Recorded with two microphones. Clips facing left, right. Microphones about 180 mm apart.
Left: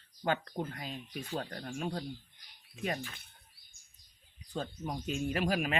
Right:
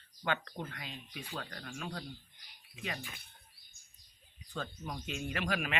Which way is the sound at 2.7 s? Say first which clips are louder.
Left 6 dB; 45° left (ahead or behind).